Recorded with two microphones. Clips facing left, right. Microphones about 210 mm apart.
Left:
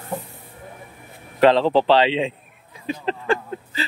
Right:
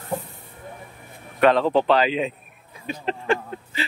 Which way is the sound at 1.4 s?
25° left (ahead or behind).